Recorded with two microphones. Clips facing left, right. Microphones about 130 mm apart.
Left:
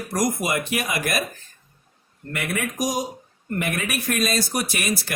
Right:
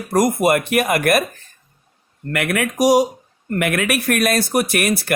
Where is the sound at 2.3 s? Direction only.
75° right (ahead or behind).